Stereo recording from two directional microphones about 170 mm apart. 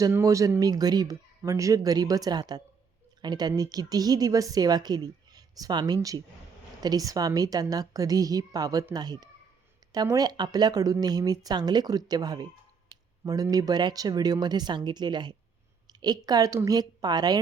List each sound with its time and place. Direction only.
0.0 s a woman's voice: 20° right (ahead or behind)